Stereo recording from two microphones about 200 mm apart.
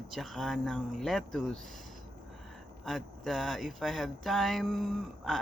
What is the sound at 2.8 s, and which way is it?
Speech, centre (ahead or behind).